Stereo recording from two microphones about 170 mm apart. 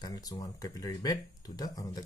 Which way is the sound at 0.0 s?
20° left (ahead or behind).